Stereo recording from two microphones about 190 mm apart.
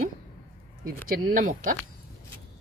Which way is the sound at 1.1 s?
45° right (ahead or behind).